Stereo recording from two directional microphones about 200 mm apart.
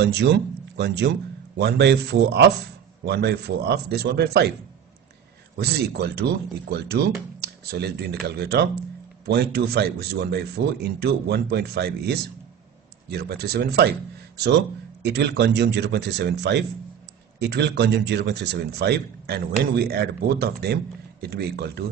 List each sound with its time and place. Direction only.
0.0 s a man's voice: 55° right (ahead or behind)
5.6 s speech: 55° right (ahead or behind)